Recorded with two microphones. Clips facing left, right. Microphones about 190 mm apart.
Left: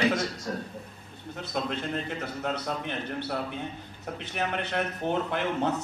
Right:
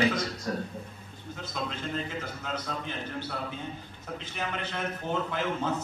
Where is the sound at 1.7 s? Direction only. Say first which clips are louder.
Left 2 dB; 65° left (ahead or behind).